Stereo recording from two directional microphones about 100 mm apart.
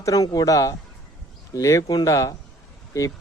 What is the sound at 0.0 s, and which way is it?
A man's voice, 35° left (ahead or behind).